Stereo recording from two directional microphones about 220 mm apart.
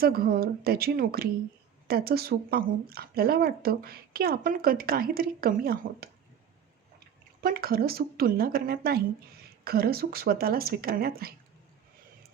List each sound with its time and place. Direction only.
0.0 s a woman's voice: 40° right (ahead or behind)
7.4 s a woman's voice: 45° right (ahead or behind)